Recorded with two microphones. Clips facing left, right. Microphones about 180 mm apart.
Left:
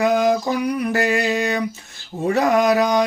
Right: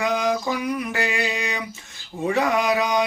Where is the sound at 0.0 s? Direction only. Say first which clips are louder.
Left 5 dB; 40° left (ahead or behind).